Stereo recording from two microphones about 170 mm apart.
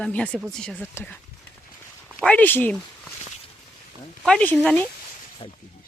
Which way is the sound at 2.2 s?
10° left (ahead or behind).